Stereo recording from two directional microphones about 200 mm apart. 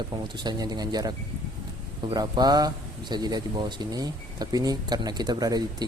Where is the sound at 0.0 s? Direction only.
20° right (ahead or behind).